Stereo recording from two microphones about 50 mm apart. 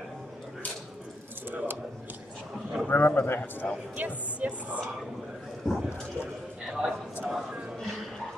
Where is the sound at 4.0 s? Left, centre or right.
Right.